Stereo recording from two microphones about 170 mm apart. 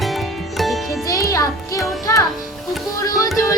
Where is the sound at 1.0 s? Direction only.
20° left (ahead or behind).